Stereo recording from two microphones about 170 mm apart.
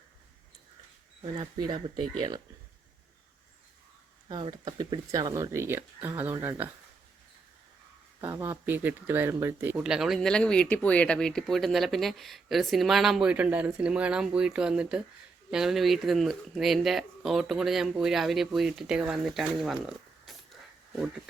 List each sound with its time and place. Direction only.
1.2 s speech: 25° right (ahead or behind)
4.3 s speech: 30° right (ahead or behind)
8.2 s speech: 15° right (ahead or behind)